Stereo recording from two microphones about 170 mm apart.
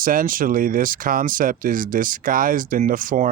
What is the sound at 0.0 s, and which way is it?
Speech, 55° right (ahead or behind).